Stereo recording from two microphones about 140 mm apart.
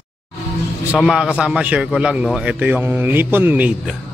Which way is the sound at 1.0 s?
Centre (ahead or behind).